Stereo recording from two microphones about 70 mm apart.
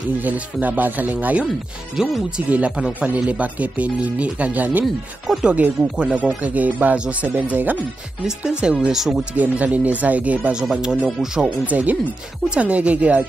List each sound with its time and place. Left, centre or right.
0.2 s speech: right
4.8 s speech: centre
5.4 s speech: centre
8.5 s speech: centre
9.3 s speech: right
11.6 s speech: right